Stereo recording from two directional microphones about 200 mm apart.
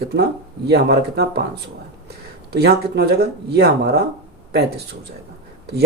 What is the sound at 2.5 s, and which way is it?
Speech, 55° right (ahead or behind).